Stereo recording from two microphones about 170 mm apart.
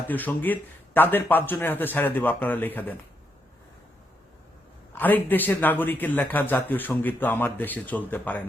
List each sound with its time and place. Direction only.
0.1 s a man's voice: 10° left (ahead or behind)
4.9 s a man's voice: 10° left (ahead or behind)